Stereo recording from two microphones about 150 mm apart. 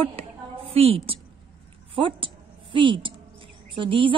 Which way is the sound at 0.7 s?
40° right (ahead or behind).